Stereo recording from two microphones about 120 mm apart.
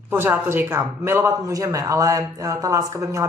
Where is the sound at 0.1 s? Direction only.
20° right (ahead or behind).